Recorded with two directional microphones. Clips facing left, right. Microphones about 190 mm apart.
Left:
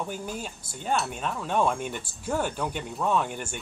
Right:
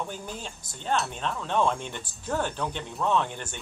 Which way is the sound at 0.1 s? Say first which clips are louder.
Left 3 dB; 10° left (ahead or behind).